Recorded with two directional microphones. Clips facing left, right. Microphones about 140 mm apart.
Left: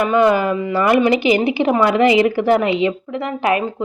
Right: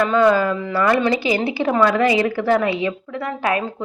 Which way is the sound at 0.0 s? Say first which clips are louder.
Left 1 dB; 15° left (ahead or behind).